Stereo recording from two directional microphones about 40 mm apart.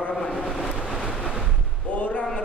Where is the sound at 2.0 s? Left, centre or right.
Left.